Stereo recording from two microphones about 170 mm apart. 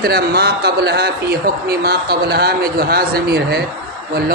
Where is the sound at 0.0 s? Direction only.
65° right (ahead or behind).